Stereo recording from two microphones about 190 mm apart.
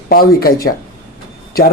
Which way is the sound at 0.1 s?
50° left (ahead or behind).